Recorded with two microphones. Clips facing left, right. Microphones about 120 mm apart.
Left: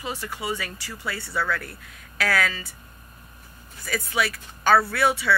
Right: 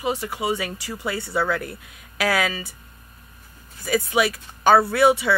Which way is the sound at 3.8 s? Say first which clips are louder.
Right 6 dB; 15° right (ahead or behind).